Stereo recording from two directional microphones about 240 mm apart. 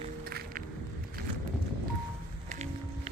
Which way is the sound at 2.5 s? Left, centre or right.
Right.